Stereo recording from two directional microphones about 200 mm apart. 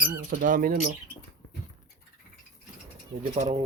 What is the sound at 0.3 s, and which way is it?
Speech, 45° right (ahead or behind).